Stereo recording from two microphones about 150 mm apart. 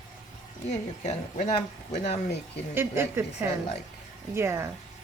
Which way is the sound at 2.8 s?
15° right (ahead or behind).